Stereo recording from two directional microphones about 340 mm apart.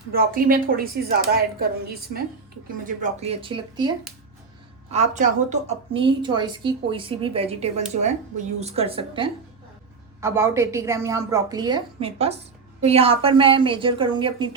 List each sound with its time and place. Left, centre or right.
0.1 s a woman's voice: right